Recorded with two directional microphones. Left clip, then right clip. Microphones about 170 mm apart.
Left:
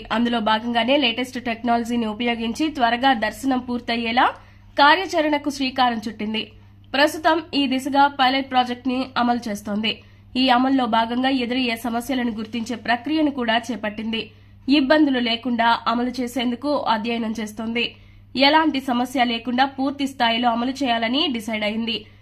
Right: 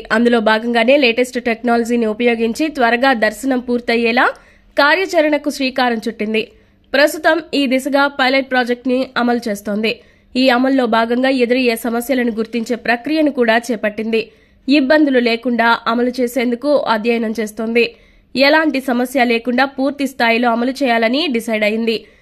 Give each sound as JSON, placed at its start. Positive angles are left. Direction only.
{"t": 0.1, "sound": "speech", "side_deg": -30}